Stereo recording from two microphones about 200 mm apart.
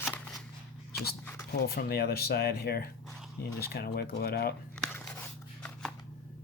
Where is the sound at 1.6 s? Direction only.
50° left (ahead or behind).